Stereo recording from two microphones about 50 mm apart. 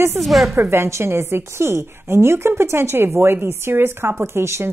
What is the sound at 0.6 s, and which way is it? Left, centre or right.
A woman's voice, right.